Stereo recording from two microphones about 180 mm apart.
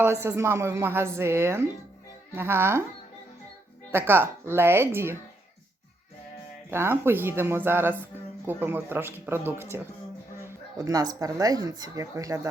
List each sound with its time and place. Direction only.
0.0 s speech: 15° right (ahead or behind)
3.9 s speech: 10° right (ahead or behind)
6.7 s speech: 10° right (ahead or behind)